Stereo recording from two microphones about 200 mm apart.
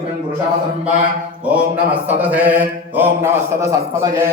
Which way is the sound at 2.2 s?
10° right (ahead or behind).